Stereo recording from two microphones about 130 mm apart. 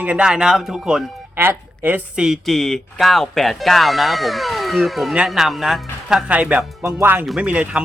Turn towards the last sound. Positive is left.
turn(degrees=-10)  # may be behind; listen again after turning